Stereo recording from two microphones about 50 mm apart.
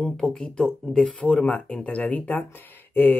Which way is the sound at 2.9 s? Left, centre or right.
Left.